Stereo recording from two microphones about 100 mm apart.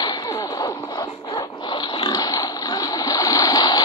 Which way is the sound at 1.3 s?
55° left (ahead or behind).